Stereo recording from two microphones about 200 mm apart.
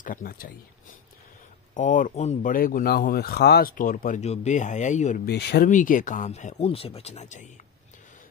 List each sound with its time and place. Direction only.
0.0 s speech: 45° left (ahead or behind)
1.7 s speech: 40° left (ahead or behind)
5.2 s speech: 55° left (ahead or behind)
5.7 s speech: 40° left (ahead or behind)